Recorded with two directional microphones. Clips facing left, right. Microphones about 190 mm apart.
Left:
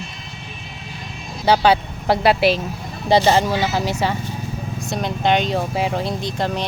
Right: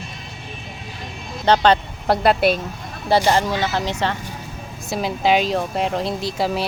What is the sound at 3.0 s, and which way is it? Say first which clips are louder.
Speech: left 2 dB; 20° left (ahead or behind).